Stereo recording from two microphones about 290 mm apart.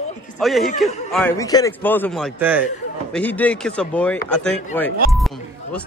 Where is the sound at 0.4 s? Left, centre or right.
Centre.